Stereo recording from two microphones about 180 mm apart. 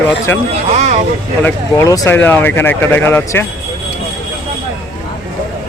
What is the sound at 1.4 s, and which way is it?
Speech, 20° left (ahead or behind).